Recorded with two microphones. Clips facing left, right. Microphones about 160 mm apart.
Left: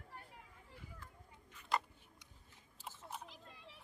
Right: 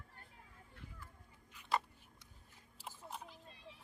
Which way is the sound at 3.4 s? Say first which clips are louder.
Right 1 dB; 85° left.